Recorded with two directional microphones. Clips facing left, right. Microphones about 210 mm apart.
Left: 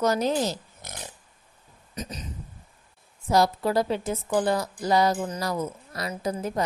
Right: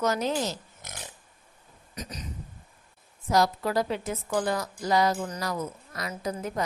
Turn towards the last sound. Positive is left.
turn(degrees=30)  # may be behind; listen again after turning